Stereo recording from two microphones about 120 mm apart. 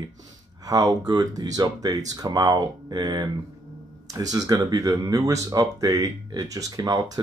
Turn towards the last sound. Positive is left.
turn(degrees=-30)  # may be behind; listen again after turning